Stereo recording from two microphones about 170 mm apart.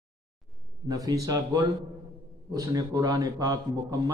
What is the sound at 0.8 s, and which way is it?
A man's voice, 20° right (ahead or behind).